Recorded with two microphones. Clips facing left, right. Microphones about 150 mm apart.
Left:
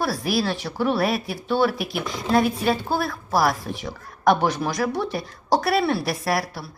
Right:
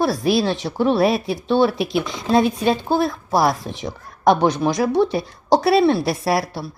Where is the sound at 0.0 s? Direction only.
25° right (ahead or behind).